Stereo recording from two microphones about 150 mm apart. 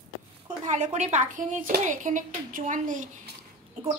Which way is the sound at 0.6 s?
50° right (ahead or behind).